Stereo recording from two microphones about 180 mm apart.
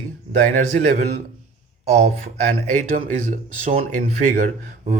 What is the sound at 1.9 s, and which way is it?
Speech, 40° right (ahead or behind).